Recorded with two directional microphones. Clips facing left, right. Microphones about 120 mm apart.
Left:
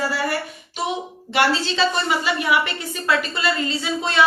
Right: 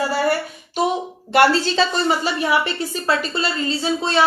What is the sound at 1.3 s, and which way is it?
A woman's voice, 45° right (ahead or behind).